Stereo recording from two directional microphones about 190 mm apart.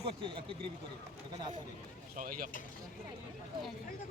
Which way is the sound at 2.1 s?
45° right (ahead or behind).